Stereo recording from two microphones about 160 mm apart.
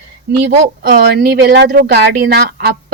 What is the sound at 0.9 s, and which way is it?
Speech, 65° right (ahead or behind).